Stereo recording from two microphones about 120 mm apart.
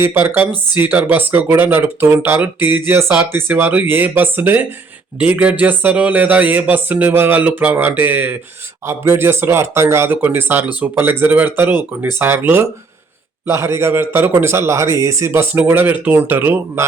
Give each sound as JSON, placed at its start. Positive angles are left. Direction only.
{"t": 0.0, "sound": "a man's voice", "side_deg": -20}